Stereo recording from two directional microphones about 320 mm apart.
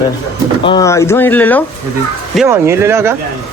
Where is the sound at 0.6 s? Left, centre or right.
Centre.